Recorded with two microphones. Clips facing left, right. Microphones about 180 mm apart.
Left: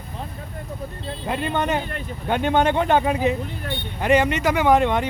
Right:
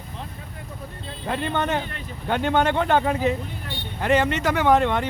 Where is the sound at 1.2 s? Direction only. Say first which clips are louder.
Left 1 dB; 10° left (ahead or behind).